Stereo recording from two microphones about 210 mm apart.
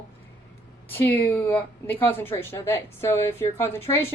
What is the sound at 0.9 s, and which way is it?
A woman's voice, 10° left (ahead or behind).